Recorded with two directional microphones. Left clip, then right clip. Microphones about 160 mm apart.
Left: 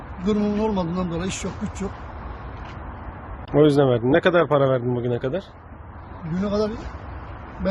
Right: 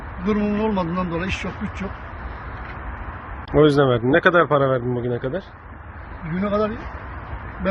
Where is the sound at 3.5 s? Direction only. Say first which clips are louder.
Right 1 dB; 10° left (ahead or behind).